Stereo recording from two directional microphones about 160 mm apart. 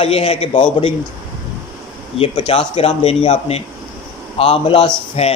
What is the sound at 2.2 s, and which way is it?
Speech, 35° left (ahead or behind).